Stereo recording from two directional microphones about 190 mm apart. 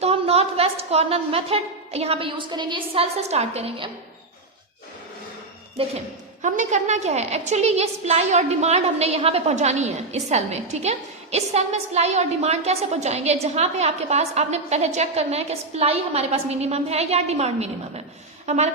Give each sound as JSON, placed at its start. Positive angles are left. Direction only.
{"t": 0.0, "sound": "a woman's voice", "side_deg": -30}
{"t": 6.4, "sound": "a woman's voice", "side_deg": -40}